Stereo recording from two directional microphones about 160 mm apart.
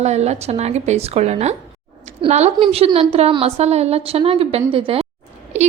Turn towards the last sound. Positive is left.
turn(degrees=-45)  # may be behind; listen again after turning